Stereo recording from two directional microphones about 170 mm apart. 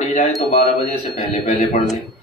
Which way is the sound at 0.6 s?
45° left (ahead or behind).